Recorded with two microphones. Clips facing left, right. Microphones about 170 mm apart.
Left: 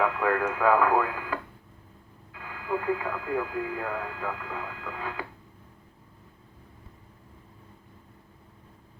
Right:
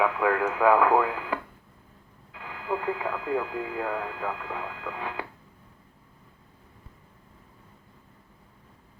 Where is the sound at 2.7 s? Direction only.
20° right (ahead or behind).